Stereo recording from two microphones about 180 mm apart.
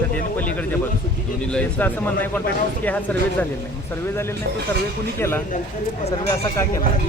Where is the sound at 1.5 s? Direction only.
10° left (ahead or behind).